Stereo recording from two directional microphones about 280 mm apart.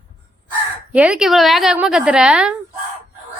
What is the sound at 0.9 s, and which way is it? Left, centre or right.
A woman's voice, centre.